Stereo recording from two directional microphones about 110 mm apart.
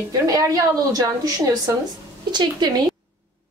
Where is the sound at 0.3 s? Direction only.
30° right (ahead or behind).